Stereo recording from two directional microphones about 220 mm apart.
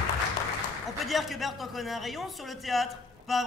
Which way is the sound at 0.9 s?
Centre (ahead or behind).